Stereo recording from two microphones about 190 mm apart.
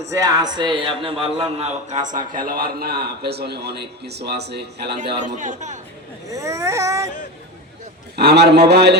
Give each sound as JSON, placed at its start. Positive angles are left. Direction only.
{"t": 0.1, "sound": "a man's voice", "side_deg": -20}
{"t": 5.4, "sound": "a man's voice", "side_deg": -40}
{"t": 6.3, "sound": "speech", "side_deg": -15}
{"t": 8.1, "sound": "a man's voice", "side_deg": -60}